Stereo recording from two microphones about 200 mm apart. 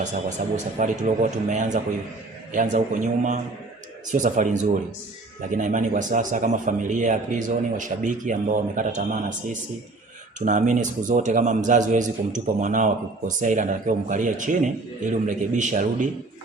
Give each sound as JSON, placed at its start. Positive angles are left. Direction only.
{"t": 0.5, "sound": "a man's voice", "side_deg": -40}